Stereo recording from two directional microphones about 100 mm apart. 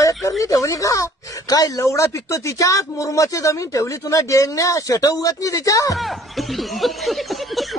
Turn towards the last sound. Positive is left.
turn(degrees=0)  # may be behind; listen again after turning